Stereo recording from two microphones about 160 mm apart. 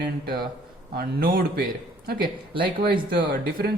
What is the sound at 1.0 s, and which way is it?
Speech, 70° right (ahead or behind).